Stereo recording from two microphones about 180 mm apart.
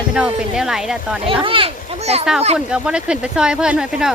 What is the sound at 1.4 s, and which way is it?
Speech, 30° right (ahead or behind).